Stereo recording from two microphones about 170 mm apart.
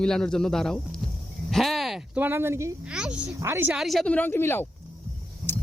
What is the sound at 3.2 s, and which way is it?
Speech, 15° right (ahead or behind).